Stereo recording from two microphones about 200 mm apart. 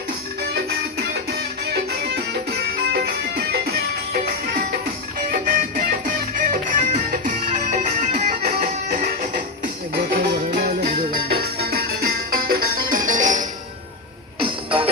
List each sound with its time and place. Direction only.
0.5 s music: 55° right (ahead or behind); by 13.4 s 40° right (ahead or behind)
14.3 s music: 25° right (ahead or behind)